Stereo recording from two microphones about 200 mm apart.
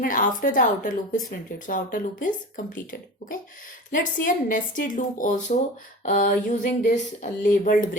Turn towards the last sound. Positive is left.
turn(degrees=45)  # may be behind; listen again after turning